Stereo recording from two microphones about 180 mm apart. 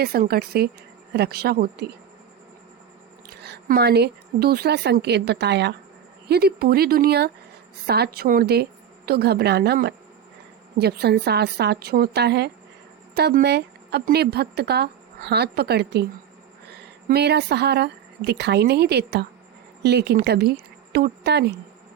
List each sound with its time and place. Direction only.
0.0 s speech: 60° right (ahead or behind)
3.4 s speech: 65° right (ahead or behind)
17.1 s speech: 65° right (ahead or behind)